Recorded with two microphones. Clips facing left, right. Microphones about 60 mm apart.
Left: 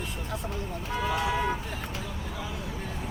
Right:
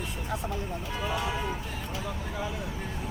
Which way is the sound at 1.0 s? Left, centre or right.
Left.